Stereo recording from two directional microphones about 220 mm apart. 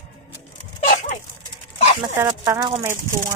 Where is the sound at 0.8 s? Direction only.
35° left (ahead or behind).